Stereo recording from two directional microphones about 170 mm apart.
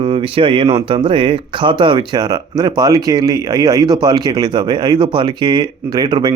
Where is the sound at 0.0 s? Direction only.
30° right (ahead or behind).